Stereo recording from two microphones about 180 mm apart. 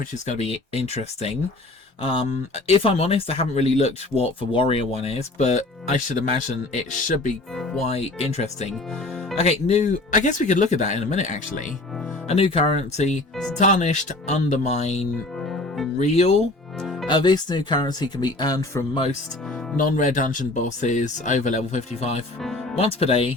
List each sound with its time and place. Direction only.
0.3 s speech: 35° left (ahead or behind)
2.6 s speech: 30° left (ahead or behind)
7.5 s speech: centre (ahead or behind)
7.9 s speech: 35° left (ahead or behind)
12.3 s speech: 30° left (ahead or behind)
16.8 s music: centre (ahead or behind)
17.1 s speech: 25° left (ahead or behind)
19.7 s speech: 45° left (ahead or behind)